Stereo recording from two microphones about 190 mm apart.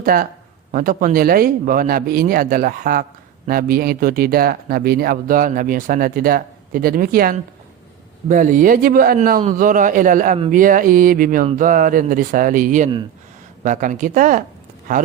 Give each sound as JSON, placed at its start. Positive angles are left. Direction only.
{"t": 0.0, "sound": "speech", "side_deg": -50}